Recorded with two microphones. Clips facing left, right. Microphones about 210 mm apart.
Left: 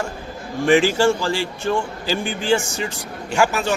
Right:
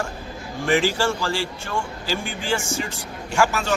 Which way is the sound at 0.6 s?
15° left (ahead or behind).